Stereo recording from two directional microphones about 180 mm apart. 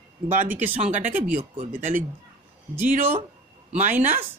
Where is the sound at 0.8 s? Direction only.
45° right (ahead or behind).